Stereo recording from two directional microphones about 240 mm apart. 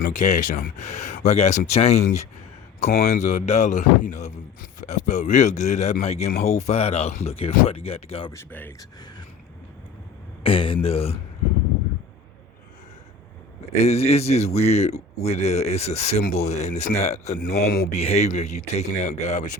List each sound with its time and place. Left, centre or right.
0.0 s speech: left
8.3 s speech: centre
10.4 s speech: left
13.8 s speech: left
17.5 s speech: left
17.9 s speech: left